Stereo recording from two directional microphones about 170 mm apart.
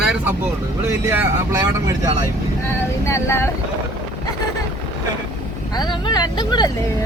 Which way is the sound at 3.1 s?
15° left (ahead or behind).